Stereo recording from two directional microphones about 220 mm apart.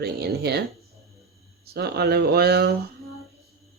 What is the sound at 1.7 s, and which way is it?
Speech, 50° right (ahead or behind).